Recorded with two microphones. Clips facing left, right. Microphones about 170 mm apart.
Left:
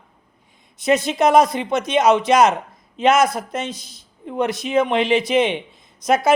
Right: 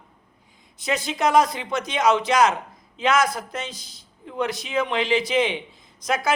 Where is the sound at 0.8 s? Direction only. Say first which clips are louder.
Left 7 dB; 20° left (ahead or behind).